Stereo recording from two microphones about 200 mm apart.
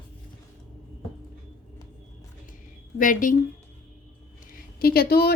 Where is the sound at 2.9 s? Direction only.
40° left (ahead or behind).